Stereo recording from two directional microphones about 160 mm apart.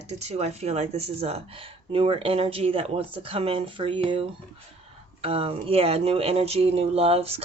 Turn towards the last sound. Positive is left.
turn(degrees=-40)  # may be behind; listen again after turning